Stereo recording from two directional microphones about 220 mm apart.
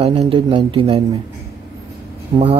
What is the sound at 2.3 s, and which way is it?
Speech, 25° right (ahead or behind).